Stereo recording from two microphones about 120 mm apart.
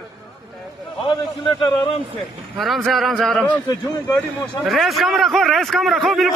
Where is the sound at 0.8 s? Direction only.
45° left (ahead or behind).